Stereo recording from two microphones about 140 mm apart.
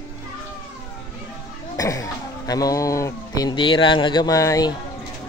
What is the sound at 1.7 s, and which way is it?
Speech, 25° left (ahead or behind).